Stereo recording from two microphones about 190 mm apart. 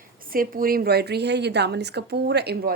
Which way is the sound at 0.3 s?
50° right (ahead or behind).